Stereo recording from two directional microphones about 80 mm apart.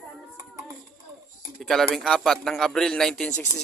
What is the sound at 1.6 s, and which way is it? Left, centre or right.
A man's voice, centre.